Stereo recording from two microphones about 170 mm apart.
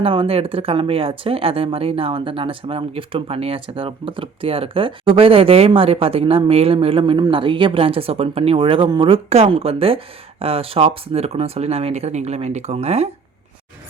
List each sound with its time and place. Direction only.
0.0 s speech: 35° right (ahead or behind)